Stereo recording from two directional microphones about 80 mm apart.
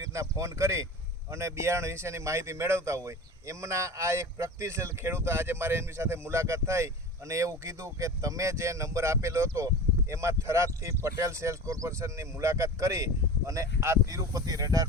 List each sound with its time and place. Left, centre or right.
0.0 s speech: right